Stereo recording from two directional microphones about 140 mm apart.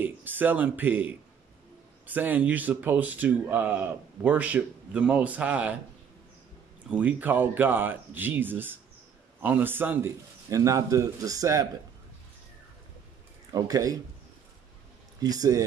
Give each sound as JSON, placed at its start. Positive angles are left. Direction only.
{"t": 0.0, "sound": "a man's voice", "side_deg": -15}
{"t": 6.9, "sound": "a man's voice", "side_deg": -10}
{"t": 13.5, "sound": "a man's voice", "side_deg": -25}
{"t": 15.1, "sound": "speech", "side_deg": -25}